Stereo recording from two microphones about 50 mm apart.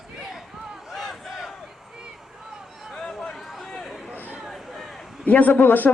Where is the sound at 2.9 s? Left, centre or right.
Centre.